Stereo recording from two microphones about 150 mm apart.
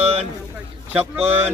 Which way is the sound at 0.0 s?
40° right (ahead or behind).